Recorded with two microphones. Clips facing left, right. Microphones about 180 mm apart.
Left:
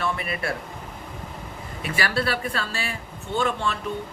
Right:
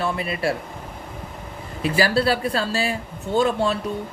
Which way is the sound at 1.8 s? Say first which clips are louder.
Right 6 dB; 30° right (ahead or behind).